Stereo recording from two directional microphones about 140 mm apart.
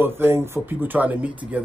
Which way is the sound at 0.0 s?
15° right (ahead or behind).